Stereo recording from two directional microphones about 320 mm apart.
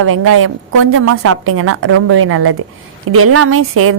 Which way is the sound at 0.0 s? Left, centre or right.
Right.